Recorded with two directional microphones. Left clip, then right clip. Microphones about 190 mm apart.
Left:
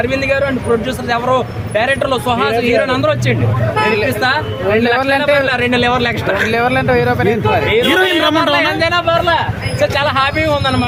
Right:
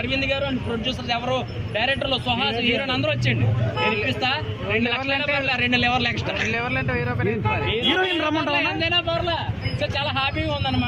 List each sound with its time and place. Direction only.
1.1 s speech: 10° left (ahead or behind)
4.9 s speech: 65° left (ahead or behind)
5.5 s speech: 15° left (ahead or behind)
6.5 s speech: 65° left (ahead or behind)
7.9 s a man's voice: 20° left (ahead or behind)